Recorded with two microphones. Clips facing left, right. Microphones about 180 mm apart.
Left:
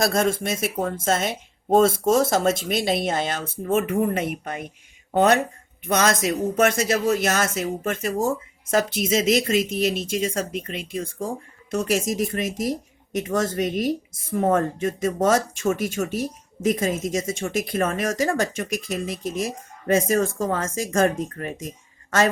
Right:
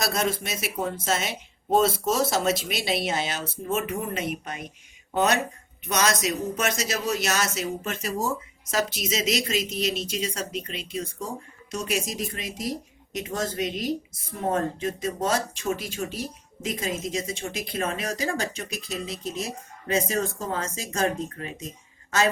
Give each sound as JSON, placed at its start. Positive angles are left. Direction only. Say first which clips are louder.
{"t": 0.0, "sound": "speech", "louder": "left 5 dB", "side_deg": 50}